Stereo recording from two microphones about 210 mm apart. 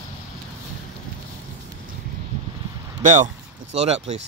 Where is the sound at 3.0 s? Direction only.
35° right (ahead or behind).